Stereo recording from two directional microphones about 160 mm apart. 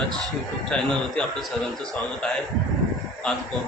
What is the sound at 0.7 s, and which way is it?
Speech, 5° left (ahead or behind).